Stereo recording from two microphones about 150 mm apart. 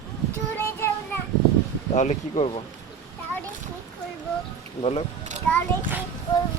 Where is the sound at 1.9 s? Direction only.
50° left (ahead or behind).